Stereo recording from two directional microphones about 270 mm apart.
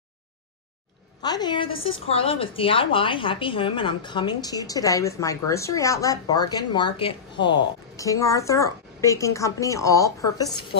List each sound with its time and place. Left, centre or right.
1.2 s a woman's voice: centre
1.7 s a woman's voice: left
2.0 s a woman's voice: left